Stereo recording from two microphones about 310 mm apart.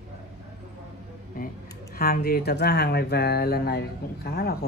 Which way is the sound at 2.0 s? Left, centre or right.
Left.